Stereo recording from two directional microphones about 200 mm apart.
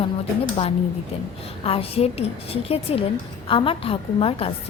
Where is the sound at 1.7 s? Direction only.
30° left (ahead or behind).